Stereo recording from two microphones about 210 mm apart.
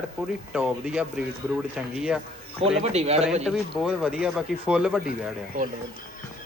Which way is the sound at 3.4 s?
Centre (ahead or behind).